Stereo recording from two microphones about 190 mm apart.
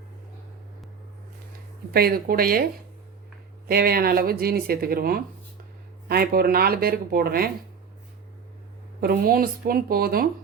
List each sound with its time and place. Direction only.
1.9 s speech: 50° right (ahead or behind)
3.7 s speech: 55° right (ahead or behind)
9.0 s speech: 50° right (ahead or behind)